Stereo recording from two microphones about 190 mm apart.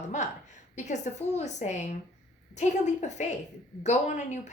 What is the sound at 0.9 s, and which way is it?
A woman's voice, 40° left (ahead or behind).